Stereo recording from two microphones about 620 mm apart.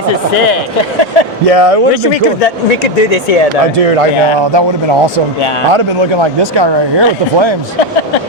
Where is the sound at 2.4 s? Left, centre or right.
Left.